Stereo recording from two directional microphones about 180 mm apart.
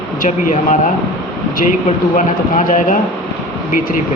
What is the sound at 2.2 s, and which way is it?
Speech, 45° left (ahead or behind).